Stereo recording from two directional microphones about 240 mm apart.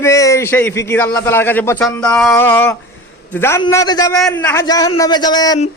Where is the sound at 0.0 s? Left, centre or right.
Centre.